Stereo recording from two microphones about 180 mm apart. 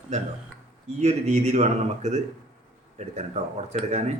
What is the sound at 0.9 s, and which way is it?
Speech, 40° right (ahead or behind).